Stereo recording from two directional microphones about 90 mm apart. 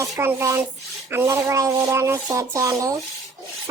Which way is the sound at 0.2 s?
25° right (ahead or behind).